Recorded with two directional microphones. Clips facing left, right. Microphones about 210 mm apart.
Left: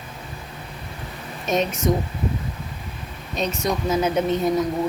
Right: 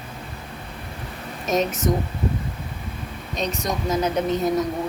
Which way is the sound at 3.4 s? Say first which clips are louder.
Left 2 dB; centre (ahead or behind).